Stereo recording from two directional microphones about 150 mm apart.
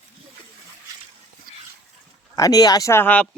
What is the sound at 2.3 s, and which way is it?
Speech, 25° left (ahead or behind).